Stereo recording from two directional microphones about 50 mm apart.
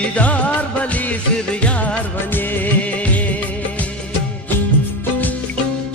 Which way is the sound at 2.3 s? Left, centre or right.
Left.